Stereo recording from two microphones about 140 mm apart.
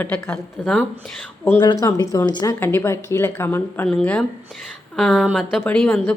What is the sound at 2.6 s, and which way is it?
A woman's voice, 15° left (ahead or behind).